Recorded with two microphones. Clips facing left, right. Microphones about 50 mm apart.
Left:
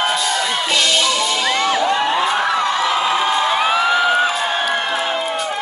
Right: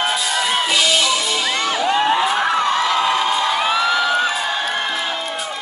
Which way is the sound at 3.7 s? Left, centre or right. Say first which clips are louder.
Left 2 dB; left.